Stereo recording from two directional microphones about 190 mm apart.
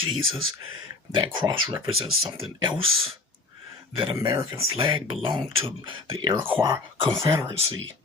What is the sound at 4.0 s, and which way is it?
Speech, 20° right (ahead or behind).